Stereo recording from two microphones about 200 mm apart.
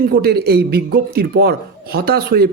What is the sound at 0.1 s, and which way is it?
Speech, 50° right (ahead or behind).